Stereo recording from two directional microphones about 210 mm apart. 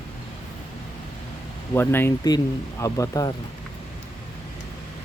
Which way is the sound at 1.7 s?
10° left (ahead or behind).